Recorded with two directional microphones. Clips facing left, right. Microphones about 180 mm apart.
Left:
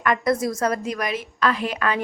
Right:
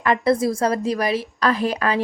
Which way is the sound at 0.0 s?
30° right (ahead or behind).